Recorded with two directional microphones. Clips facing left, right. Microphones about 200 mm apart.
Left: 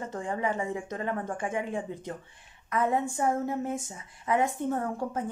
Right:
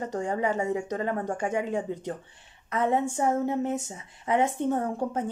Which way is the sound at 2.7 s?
25° right (ahead or behind).